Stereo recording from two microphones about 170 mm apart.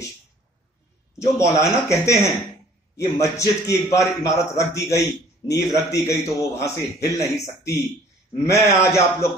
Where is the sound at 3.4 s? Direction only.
15° left (ahead or behind).